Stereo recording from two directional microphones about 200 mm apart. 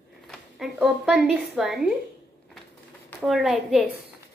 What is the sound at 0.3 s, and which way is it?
A woman's voice, centre (ahead or behind).